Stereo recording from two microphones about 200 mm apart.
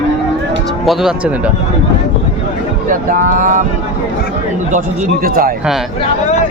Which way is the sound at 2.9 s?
40° right (ahead or behind).